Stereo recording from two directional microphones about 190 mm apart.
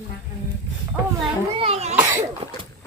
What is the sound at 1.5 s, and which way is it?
Speech, 30° right (ahead or behind).